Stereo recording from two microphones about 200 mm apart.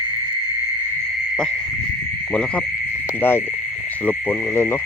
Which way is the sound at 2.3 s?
5° left (ahead or behind).